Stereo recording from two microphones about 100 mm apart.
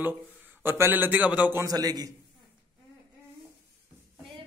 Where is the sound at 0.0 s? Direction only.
15° right (ahead or behind).